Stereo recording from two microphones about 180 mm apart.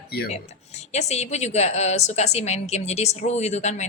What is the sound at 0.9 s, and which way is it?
A woman's voice, 40° left (ahead or behind).